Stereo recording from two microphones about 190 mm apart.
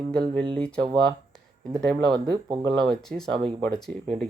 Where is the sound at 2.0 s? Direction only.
20° right (ahead or behind).